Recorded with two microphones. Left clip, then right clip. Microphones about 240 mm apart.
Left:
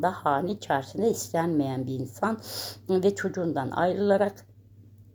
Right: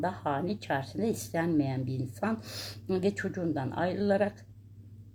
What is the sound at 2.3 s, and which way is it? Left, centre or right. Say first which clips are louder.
Speech: left 4 dB; left.